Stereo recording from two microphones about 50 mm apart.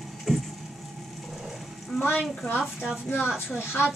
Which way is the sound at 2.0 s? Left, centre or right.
Left.